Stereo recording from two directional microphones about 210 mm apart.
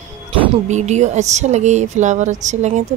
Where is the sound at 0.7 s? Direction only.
35° right (ahead or behind).